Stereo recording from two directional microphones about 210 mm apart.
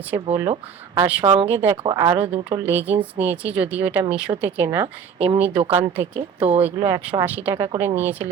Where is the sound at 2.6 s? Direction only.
10° right (ahead or behind).